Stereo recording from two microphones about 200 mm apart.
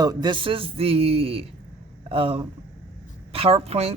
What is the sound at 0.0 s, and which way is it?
A man's voice, 20° right (ahead or behind).